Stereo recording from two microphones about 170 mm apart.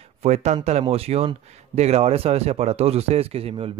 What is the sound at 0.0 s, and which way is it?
Speech, 40° right (ahead or behind).